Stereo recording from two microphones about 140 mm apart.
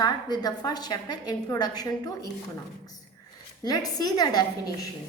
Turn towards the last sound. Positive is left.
turn(degrees=30)  # may be behind; listen again after turning